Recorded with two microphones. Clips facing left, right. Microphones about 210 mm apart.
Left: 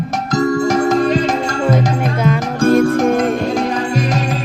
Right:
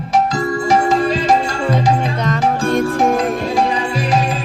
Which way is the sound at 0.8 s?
45° left (ahead or behind).